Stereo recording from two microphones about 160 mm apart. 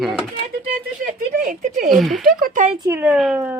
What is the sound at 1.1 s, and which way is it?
Speech, 55° right (ahead or behind).